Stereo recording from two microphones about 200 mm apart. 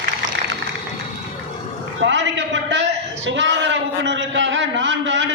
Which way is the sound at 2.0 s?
65° right (ahead or behind).